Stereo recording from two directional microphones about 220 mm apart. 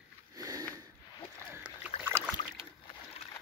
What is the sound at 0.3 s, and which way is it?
Sniff, 15° right (ahead or behind).